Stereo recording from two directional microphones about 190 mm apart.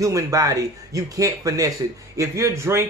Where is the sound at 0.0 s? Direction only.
15° right (ahead or behind).